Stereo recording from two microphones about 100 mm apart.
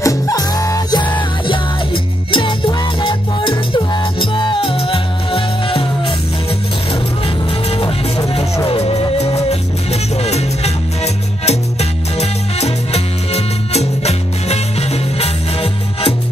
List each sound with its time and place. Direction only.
0.0 s music: 35° left (ahead or behind)
2.3 s music: 55° left (ahead or behind)
8.6 s music: 75° left (ahead or behind)